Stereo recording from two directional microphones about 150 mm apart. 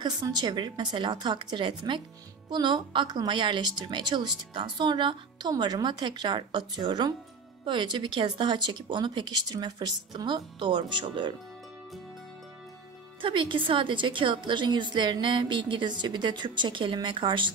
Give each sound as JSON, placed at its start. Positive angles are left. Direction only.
{"t": 0.0, "sound": "a woman's voice", "side_deg": -30}
{"t": 13.2, "sound": "a woman's voice", "side_deg": -35}